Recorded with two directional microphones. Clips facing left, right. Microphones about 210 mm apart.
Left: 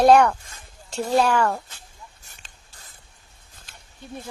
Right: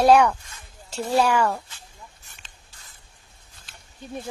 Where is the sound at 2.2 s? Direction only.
40° left (ahead or behind).